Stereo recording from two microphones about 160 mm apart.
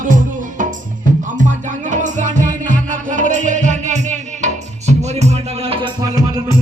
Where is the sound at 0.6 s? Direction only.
50° right (ahead or behind); by 5.9 s 35° right (ahead or behind).